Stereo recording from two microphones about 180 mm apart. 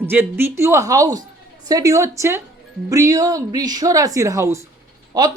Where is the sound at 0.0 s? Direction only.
10° right (ahead or behind).